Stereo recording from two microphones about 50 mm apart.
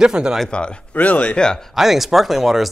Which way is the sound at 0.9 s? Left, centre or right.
Left.